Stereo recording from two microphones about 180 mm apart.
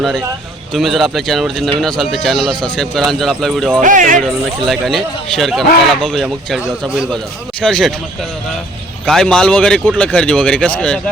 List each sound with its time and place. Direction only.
0.7 s speech: centre (ahead or behind)
3.8 s speech: 45° right (ahead or behind)
4.2 s speech: centre (ahead or behind)